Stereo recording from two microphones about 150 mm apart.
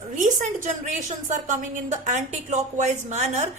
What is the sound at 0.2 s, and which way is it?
A woman's voice, 60° right (ahead or behind).